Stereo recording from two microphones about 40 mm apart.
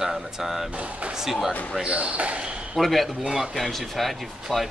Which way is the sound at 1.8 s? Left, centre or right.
Right.